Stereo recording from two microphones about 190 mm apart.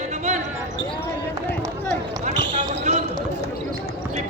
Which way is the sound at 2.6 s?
35° right (ahead or behind).